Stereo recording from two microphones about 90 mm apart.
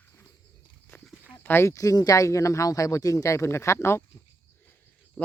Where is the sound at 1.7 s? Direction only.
40° left (ahead or behind).